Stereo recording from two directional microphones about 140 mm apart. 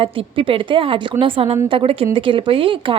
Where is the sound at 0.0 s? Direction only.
40° right (ahead or behind).